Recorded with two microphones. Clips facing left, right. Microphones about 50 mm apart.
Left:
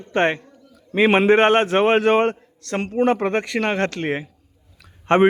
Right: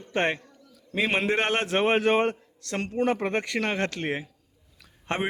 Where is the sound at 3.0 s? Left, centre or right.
Left.